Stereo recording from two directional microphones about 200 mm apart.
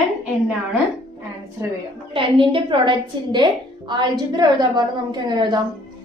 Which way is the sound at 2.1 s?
25° right (ahead or behind).